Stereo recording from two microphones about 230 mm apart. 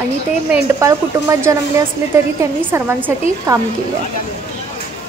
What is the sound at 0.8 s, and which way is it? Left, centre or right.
Speech, centre.